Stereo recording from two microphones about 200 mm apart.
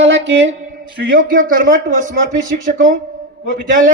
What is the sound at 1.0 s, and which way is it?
A man's voice, 45° right (ahead or behind).